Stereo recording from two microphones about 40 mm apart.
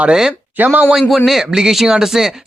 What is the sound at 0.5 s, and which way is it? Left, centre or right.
Speech, right.